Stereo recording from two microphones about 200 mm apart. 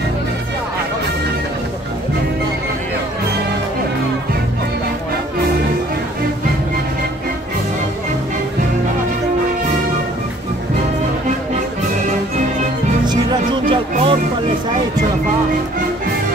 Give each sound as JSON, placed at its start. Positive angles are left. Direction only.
{"t": 13.0, "sound": "music", "side_deg": -20}